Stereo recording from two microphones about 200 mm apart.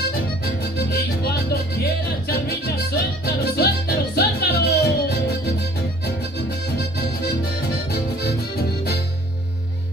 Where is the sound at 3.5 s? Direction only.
50° left (ahead or behind).